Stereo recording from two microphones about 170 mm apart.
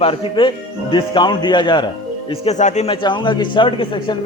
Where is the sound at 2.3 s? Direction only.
40° left (ahead or behind).